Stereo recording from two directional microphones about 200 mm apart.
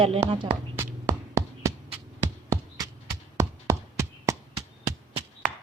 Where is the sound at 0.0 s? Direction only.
30° right (ahead or behind).